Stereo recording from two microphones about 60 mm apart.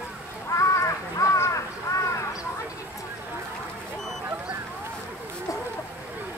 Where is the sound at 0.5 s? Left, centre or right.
Left.